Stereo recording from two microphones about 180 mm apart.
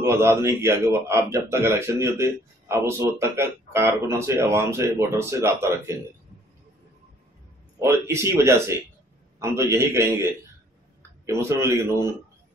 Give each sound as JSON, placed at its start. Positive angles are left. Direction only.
{"t": 0.0, "sound": "speech", "side_deg": -15}
{"t": 7.8, "sound": "speech", "side_deg": -15}